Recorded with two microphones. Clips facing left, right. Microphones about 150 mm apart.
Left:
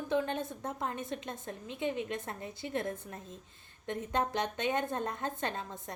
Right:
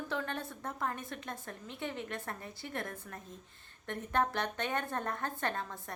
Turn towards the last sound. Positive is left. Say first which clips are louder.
# even
turn(degrees=20)  # may be behind; listen again after turning